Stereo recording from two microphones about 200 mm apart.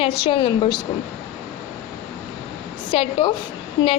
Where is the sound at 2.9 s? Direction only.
25° left (ahead or behind).